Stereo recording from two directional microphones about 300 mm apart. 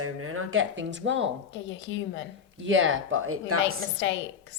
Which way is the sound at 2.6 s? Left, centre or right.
Right.